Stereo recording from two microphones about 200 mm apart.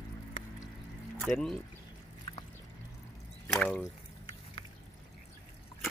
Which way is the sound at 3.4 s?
5° left (ahead or behind).